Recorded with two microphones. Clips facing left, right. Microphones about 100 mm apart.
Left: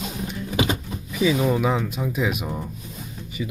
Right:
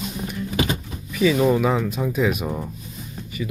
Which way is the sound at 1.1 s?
15° left (ahead or behind).